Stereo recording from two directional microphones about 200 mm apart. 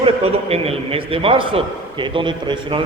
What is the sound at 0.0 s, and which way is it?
A man's voice, 30° right (ahead or behind).